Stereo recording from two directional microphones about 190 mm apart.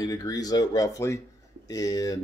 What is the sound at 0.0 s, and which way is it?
Speech, 20° left (ahead or behind).